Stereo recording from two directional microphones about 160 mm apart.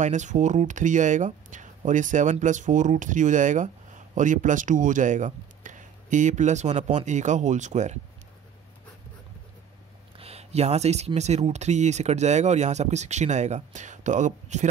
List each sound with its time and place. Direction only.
0.0 s speech: 50° right (ahead or behind)
10.1 s speech: 40° right (ahead or behind)